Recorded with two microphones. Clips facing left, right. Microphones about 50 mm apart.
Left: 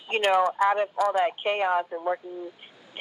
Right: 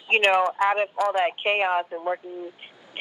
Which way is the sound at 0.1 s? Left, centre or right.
Right.